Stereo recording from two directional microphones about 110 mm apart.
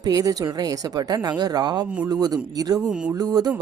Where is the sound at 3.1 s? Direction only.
35° right (ahead or behind).